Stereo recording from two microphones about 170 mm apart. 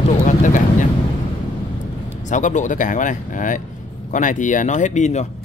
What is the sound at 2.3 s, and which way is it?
Speech, 45° left (ahead or behind).